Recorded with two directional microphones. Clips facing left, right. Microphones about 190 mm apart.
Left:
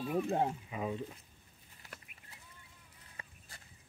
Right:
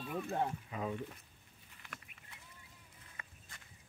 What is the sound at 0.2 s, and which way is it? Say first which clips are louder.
Speech: left 3 dB; 20° left (ahead or behind).